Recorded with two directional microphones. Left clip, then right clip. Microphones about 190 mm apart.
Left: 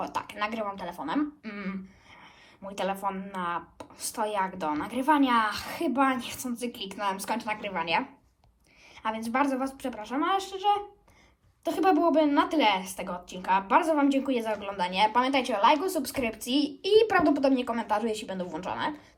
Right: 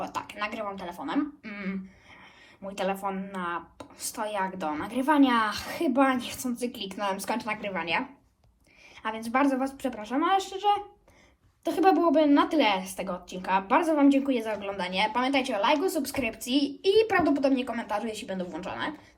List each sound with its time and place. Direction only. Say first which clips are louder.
0.0 s a woman's voice: left 1 dB; 15° left (ahead or behind)
9.0 s a woman's voice: right 1 dB; 15° left (ahead or behind)